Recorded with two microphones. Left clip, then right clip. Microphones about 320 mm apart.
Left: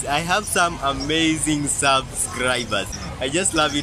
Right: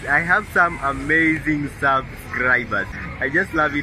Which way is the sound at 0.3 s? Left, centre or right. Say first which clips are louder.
Right 1 dB; centre.